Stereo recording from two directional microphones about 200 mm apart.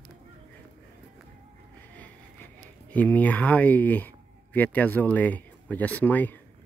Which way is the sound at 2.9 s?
10° left (ahead or behind).